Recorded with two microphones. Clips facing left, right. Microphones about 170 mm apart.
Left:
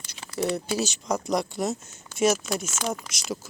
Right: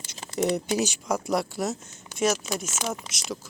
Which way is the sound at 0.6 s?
15° right (ahead or behind).